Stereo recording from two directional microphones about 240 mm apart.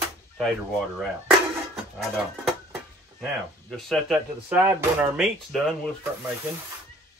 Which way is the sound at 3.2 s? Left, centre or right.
Centre.